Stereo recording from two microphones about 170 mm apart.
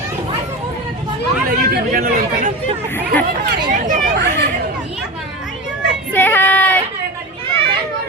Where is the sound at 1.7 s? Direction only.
60° right (ahead or behind).